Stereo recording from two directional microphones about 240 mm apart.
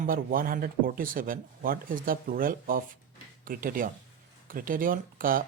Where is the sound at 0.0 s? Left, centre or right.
Right.